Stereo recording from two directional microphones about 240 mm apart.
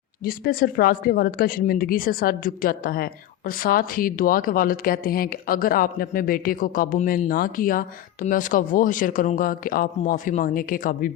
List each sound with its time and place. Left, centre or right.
0.2 s speech: left